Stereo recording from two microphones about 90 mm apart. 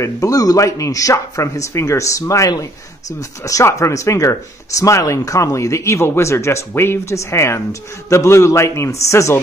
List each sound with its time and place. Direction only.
0.0 s speech: 40° left (ahead or behind)